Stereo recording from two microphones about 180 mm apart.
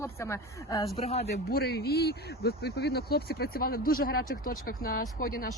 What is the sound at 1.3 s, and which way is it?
Speech, 60° left (ahead or behind).